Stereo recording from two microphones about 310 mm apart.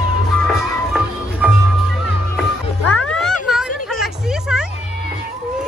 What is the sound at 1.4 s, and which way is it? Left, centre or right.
Music, centre.